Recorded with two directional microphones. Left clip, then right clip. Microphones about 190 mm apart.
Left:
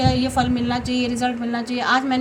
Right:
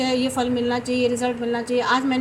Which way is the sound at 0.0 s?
45° left (ahead or behind).